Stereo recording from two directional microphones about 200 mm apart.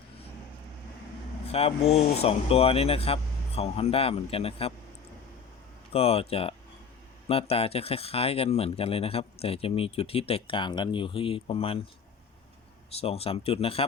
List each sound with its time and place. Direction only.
1.5 s speech: 30° left (ahead or behind)
5.9 s speech: 30° left (ahead or behind)
13.0 s speech: 30° left (ahead or behind)